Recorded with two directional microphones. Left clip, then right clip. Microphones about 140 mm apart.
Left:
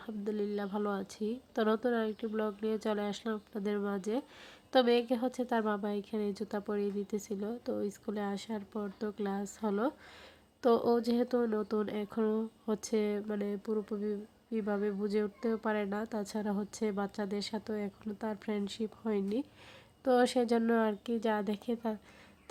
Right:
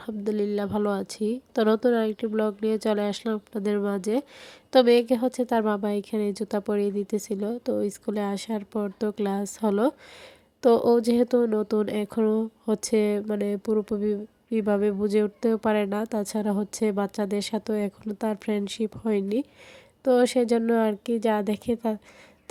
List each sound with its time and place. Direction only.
0.0 s speech: 40° right (ahead or behind)